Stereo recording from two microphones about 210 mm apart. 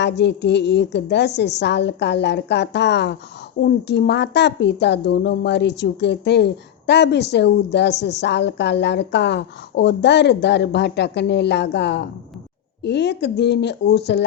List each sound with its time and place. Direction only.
0.0 s a woman's voice: 55° left (ahead or behind)